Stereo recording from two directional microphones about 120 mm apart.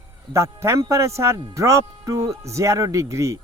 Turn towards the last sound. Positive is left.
turn(degrees=-25)  # may be behind; listen again after turning